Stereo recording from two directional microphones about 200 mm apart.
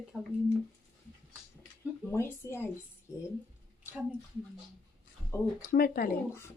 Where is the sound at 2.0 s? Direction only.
10° left (ahead or behind).